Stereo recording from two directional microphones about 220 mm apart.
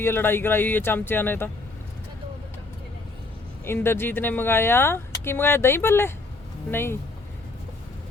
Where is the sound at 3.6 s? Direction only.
10° left (ahead or behind).